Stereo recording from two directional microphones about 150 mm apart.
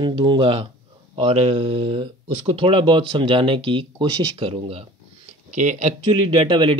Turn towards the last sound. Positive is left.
turn(degrees=-35)  # may be behind; listen again after turning